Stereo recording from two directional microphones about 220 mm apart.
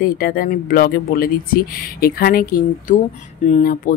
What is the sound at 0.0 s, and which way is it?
Speech, 40° left (ahead or behind).